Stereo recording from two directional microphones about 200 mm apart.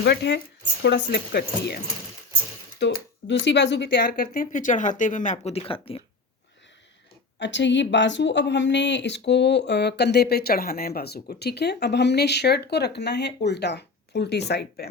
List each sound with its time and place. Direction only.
0.0 s speech: 55° left (ahead or behind)
2.7 s speech: 65° left (ahead or behind)
4.1 s speech: 40° left (ahead or behind)
7.3 s speech: 65° left (ahead or behind)